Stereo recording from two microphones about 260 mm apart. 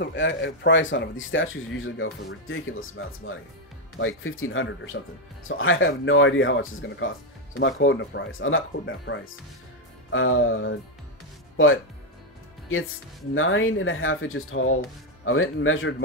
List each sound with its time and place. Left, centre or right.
0.0 s speech: left
13.3 s speech: left